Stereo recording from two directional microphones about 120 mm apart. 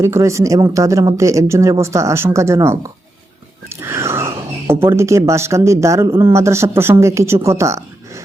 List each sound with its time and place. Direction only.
0.0 s speech: 25° right (ahead or behind)
3.7 s a sound: 25° right (ahead or behind)
4.7 s speech: 20° right (ahead or behind)